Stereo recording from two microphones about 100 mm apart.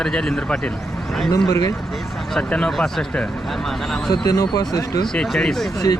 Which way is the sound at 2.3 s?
5° left (ahead or behind).